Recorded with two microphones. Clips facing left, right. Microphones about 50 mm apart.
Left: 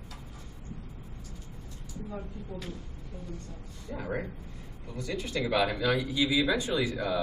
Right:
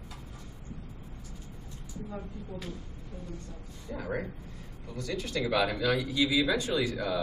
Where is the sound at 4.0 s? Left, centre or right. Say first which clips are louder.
Even; centre.